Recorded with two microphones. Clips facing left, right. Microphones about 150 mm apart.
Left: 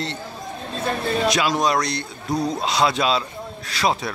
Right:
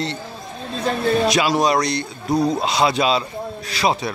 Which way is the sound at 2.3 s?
25° right (ahead or behind).